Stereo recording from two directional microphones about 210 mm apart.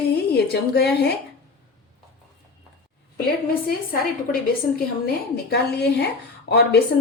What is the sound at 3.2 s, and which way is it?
A woman's voice, 45° left (ahead or behind).